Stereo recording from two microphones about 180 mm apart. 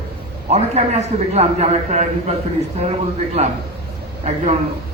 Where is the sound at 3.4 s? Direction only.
35° right (ahead or behind).